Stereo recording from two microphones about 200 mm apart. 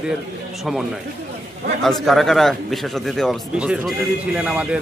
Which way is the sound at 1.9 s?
Centre (ahead or behind).